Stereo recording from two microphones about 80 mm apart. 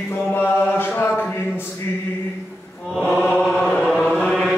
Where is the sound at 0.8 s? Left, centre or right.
Left.